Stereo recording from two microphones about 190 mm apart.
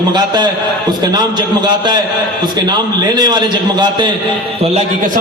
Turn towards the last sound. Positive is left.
turn(degrees=-25)  # may be behind; listen again after turning